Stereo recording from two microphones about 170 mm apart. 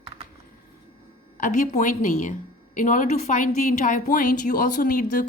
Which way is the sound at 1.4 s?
45° left (ahead or behind).